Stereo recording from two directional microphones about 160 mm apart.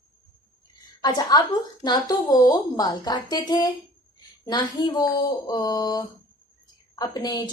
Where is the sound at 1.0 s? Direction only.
25° left (ahead or behind).